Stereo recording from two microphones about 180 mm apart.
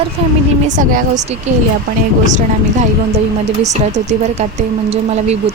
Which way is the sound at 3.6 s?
40° right (ahead or behind).